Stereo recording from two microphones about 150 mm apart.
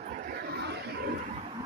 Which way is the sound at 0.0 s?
75° right (ahead or behind).